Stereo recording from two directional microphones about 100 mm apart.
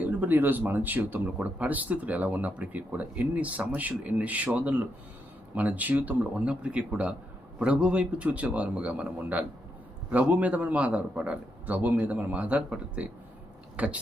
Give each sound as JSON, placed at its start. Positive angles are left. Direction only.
{"t": 0.0, "sound": "speech", "side_deg": -20}